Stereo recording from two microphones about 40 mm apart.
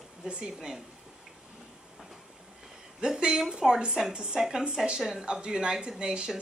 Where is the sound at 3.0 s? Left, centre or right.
Right.